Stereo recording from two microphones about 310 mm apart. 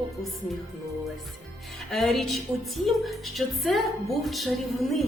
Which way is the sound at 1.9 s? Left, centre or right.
Centre.